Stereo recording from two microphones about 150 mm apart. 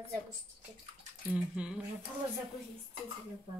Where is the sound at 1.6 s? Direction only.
10° right (ahead or behind).